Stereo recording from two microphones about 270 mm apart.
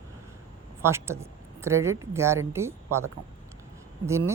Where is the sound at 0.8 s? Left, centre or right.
Centre.